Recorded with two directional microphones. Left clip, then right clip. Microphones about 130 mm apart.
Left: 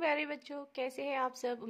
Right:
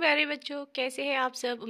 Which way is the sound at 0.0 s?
10° right (ahead or behind).